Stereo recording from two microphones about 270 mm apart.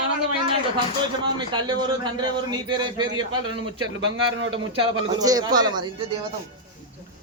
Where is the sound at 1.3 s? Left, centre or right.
Centre.